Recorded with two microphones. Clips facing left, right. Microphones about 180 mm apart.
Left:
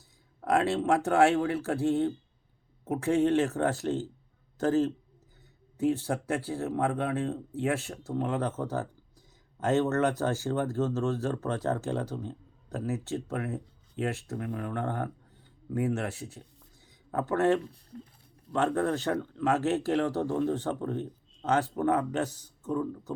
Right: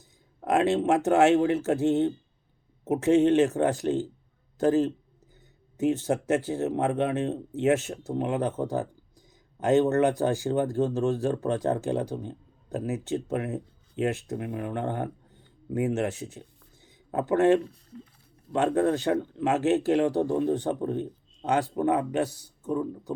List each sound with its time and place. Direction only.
0.4 s a man's voice: 20° right (ahead or behind)
16.8 s a sound: 20° right (ahead or behind)
17.9 s speech: 50° left (ahead or behind)
18.5 s speech: 20° right (ahead or behind)